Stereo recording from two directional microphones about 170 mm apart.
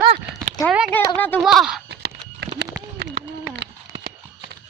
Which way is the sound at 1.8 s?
85° right.